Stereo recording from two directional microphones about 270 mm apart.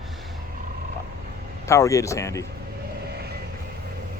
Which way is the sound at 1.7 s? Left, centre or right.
Centre.